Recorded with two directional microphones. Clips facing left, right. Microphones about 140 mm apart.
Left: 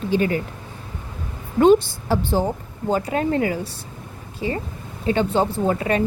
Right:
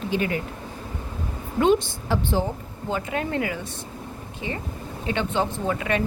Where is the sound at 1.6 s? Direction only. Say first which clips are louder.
Left 6 dB; 40° left (ahead or behind).